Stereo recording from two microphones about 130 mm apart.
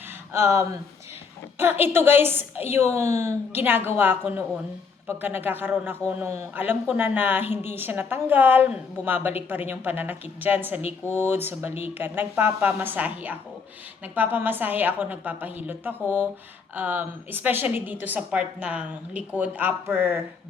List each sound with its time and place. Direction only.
0.3 s speech: 20° right (ahead or behind)
1.8 s a woman's voice: 15° right (ahead or behind)